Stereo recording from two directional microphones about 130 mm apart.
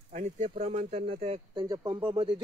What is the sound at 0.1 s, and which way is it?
Speech, 65° right (ahead or behind).